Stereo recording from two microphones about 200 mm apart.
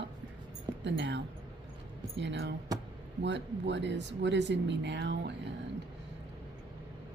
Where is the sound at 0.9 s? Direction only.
60° right (ahead or behind).